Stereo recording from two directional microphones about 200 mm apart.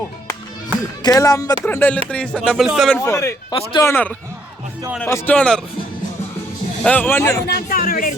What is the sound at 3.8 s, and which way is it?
Speech, 10° left (ahead or behind).